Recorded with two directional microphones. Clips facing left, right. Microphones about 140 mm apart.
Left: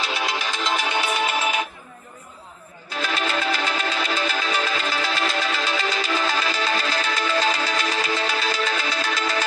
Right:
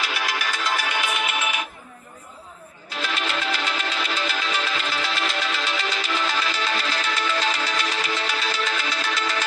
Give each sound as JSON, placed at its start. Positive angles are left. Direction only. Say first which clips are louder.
{"t": 0.0, "sound": "music", "louder": "left 2 dB", "side_deg": 25}
{"t": 3.0, "sound": "music", "louder": "left 3 dB", "side_deg": 40}